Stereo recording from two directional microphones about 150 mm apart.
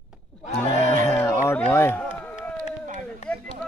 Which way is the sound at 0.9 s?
15° left (ahead or behind).